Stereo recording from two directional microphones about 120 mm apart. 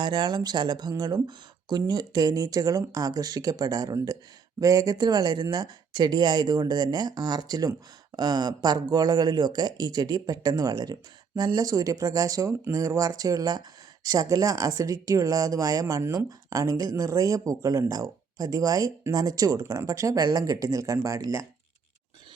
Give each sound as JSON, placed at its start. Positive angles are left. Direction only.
{"t": 0.0, "sound": "speech", "side_deg": -40}